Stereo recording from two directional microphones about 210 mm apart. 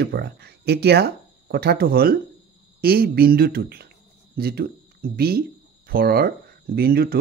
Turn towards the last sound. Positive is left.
turn(degrees=-45)  # may be behind; listen again after turning